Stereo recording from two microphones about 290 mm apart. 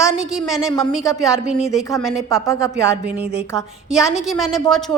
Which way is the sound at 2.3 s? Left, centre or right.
Centre.